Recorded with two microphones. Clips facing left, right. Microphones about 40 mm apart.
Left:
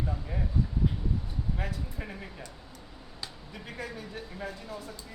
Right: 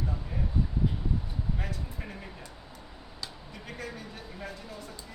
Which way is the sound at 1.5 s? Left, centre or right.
Centre.